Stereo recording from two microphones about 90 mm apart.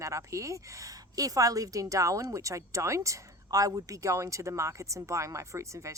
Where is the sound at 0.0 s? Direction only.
35° right (ahead or behind).